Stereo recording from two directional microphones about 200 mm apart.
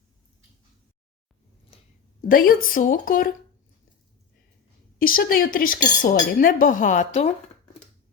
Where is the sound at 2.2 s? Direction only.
45° left (ahead or behind).